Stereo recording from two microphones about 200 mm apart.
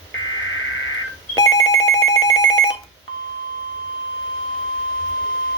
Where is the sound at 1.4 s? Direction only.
20° left (ahead or behind).